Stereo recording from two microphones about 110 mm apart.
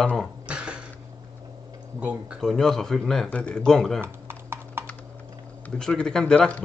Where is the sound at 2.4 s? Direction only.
5° left (ahead or behind).